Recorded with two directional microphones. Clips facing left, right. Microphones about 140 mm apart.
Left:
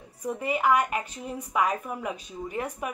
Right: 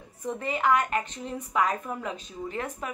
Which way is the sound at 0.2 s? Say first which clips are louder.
Left 1 dB; 10° left (ahead or behind).